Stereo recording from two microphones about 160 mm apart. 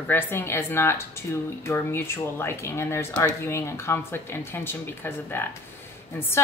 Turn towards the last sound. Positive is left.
turn(degrees=15)  # may be behind; listen again after turning